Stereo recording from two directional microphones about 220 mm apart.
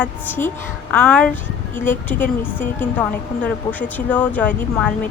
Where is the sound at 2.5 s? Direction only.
10° left (ahead or behind).